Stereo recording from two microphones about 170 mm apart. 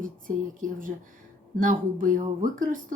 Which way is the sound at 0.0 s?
50° right (ahead or behind).